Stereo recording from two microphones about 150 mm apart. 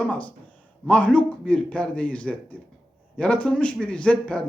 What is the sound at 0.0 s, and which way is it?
Speech, 10° left (ahead or behind).